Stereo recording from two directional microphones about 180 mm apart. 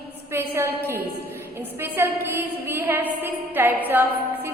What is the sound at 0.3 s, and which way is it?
A woman's voice, 15° right (ahead or behind).